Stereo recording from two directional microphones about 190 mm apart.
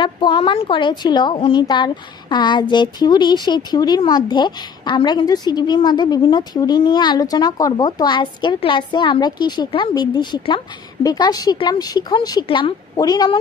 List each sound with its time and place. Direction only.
0.0 s speech: 25° left (ahead or behind)